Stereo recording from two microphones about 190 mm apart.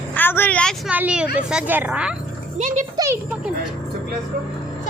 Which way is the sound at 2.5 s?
40° right (ahead or behind).